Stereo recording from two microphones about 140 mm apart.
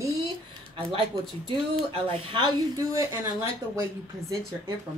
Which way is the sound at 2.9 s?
25° right (ahead or behind).